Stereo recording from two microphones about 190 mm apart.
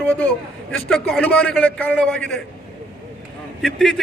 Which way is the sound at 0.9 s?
Centre (ahead or behind).